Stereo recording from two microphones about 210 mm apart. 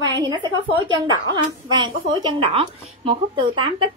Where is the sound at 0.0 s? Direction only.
20° right (ahead or behind).